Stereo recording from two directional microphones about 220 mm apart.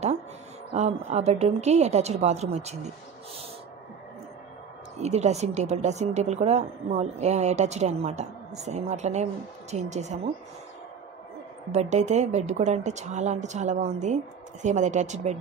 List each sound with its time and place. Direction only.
0.7 s a woman's voice: 30° right (ahead or behind)
4.9 s speech: 30° right (ahead or behind)
11.7 s speech: 30° right (ahead or behind)